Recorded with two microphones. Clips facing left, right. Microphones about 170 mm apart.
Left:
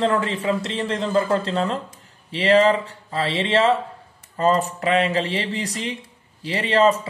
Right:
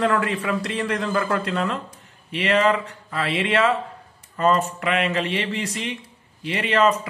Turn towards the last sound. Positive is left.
turn(degrees=35)  # may be behind; listen again after turning